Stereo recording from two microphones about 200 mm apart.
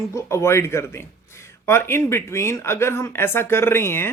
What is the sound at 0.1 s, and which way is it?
A man's voice, 15° left (ahead or behind).